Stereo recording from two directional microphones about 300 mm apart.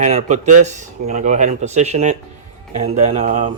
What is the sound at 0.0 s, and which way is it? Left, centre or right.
Speech, right.